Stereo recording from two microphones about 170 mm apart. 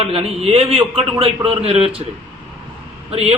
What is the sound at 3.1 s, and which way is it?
Speech, 35° right (ahead or behind).